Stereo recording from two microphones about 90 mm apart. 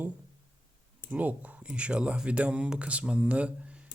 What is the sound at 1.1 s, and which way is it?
Speech, 15° right (ahead or behind).